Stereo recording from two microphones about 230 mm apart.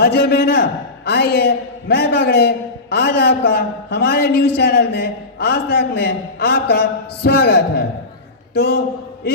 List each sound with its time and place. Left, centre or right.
0.0 s a man's voice: left